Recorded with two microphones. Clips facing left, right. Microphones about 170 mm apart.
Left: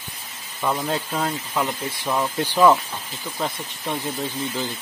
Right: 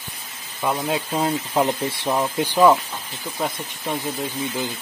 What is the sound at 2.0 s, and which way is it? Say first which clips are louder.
Speech: right 1 dB; 15° right (ahead or behind).